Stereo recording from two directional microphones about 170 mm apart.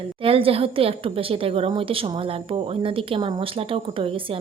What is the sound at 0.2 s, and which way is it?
A woman's voice, 35° right (ahead or behind).